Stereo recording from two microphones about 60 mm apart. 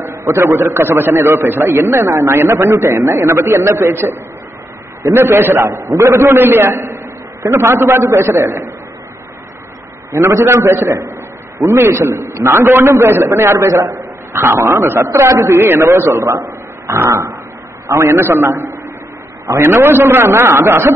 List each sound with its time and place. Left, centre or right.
0.0 s a sound: right
0.5 s a man's voice: right
10.1 s a man's voice: right
15.5 s a man's voice: right
15.8 s a man's voice: right
16.8 s dog: right
17.1 s a sound: right
17.9 s a man's voice: right